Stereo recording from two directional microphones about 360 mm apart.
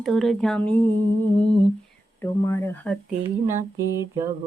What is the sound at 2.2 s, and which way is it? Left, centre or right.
Speech, centre.